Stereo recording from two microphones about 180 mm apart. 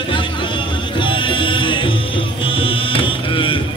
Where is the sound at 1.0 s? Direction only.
25° left (ahead or behind).